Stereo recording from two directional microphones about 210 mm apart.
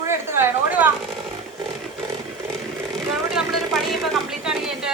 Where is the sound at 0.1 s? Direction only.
10° right (ahead or behind).